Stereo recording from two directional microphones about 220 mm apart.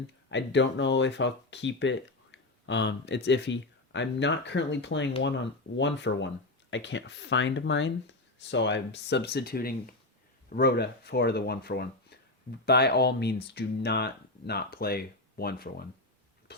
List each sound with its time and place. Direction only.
0.3 s speech: 55° left (ahead or behind)